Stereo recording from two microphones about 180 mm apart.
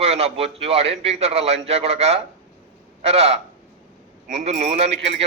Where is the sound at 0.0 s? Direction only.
35° right (ahead or behind).